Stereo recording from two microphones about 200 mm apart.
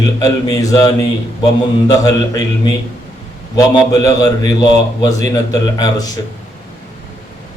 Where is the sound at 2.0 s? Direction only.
20° left (ahead or behind).